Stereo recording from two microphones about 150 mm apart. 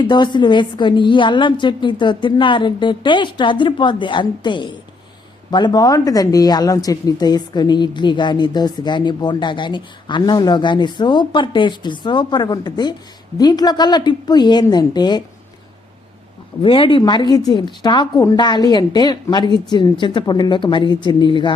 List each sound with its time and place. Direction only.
0.0 s a woman's voice: 30° left (ahead or behind)
16.6 s speech: 35° left (ahead or behind)